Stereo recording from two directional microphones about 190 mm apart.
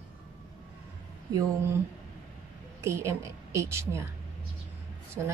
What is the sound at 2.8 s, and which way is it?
A woman's voice, 15° right (ahead or behind).